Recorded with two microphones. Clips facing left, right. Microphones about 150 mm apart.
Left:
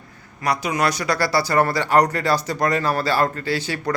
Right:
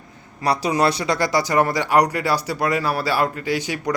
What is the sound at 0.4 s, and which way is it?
A man's voice, 30° right (ahead or behind).